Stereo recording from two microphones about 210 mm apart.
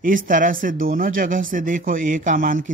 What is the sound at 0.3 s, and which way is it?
A man's voice, 40° right (ahead or behind).